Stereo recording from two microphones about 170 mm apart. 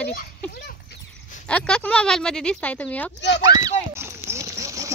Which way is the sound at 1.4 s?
5° left (ahead or behind).